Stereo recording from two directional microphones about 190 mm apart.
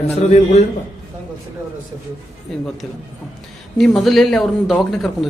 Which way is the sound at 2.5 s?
Centre (ahead or behind).